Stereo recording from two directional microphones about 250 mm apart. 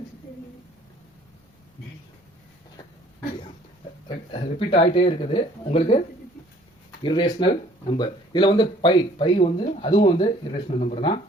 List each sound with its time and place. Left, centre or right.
4.1 s speech: left
7.0 s speech: centre